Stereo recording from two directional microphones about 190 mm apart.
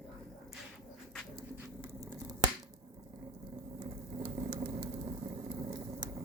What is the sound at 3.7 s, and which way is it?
Vehicle, 20° right (ahead or behind).